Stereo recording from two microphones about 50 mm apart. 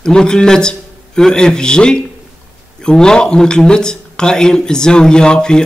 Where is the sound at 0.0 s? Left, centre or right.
Centre.